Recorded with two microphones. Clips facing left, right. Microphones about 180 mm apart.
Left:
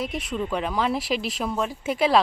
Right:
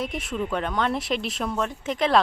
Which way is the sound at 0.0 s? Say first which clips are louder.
Even; centre (ahead or behind).